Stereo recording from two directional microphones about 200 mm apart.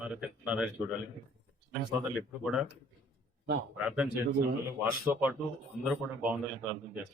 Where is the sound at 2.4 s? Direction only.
5° right (ahead or behind).